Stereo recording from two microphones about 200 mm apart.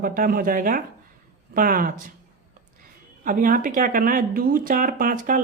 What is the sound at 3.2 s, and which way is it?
Speech, 40° right (ahead or behind).